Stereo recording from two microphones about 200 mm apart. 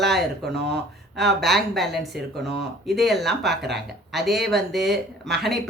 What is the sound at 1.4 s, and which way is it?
Speech, centre (ahead or behind).